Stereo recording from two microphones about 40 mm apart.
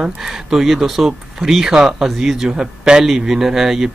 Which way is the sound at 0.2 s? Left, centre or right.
Centre.